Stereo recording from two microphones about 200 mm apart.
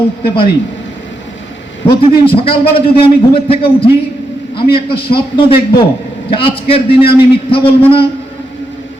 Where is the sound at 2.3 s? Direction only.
25° left (ahead or behind).